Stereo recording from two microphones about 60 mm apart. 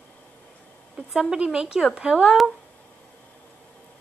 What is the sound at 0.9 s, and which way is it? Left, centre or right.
Speech, centre.